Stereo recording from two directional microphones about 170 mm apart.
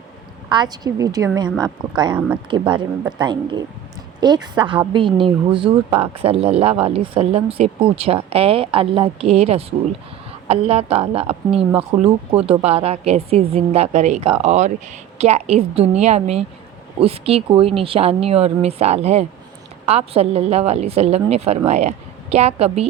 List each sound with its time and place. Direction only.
0.5 s a woman's voice: 25° right (ahead or behind)